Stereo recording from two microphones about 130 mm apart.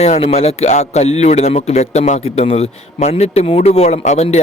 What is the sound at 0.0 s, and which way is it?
A man's voice, 55° left (ahead or behind).